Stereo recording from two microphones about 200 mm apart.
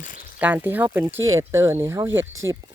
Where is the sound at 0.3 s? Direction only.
10° right (ahead or behind).